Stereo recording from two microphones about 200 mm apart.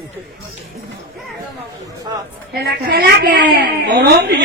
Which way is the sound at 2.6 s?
50° right (ahead or behind).